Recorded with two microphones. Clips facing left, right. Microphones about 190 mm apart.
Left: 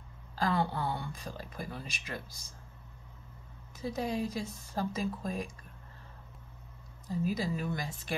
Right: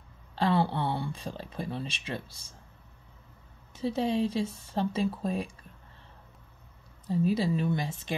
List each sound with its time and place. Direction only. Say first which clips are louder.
0.4 s speech: right 4 dB; 30° right (ahead or behind)
3.7 s speech: right 6 dB; 25° right (ahead or behind)
7.1 s speech: right 6 dB; 30° right (ahead or behind)